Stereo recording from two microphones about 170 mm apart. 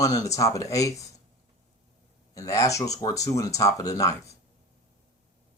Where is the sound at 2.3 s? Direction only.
20° left (ahead or behind).